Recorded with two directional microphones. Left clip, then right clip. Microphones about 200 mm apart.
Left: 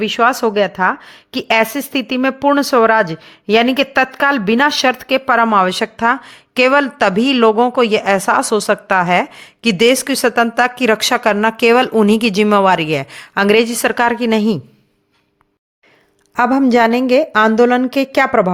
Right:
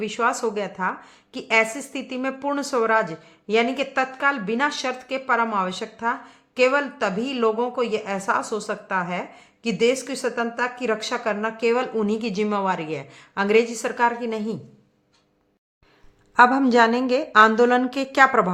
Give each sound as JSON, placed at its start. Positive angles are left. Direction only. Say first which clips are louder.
{"t": 0.0, "sound": "a woman's voice", "louder": "left 9 dB", "side_deg": 40}
{"t": 16.3, "sound": "a woman's voice", "louder": "left 3 dB", "side_deg": 30}